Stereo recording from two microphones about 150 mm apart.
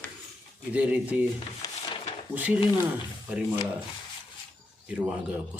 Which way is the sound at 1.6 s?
25° left (ahead or behind).